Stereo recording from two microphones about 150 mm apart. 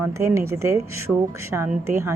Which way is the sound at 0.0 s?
20° right (ahead or behind).